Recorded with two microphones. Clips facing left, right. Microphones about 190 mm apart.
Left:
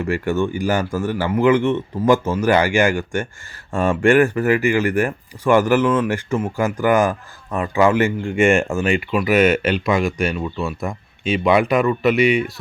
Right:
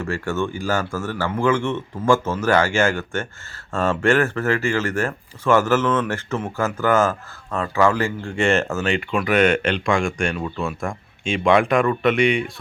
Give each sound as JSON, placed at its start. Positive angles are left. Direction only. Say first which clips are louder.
{"t": 0.0, "sound": "speech", "louder": "left 4 dB", "side_deg": 15}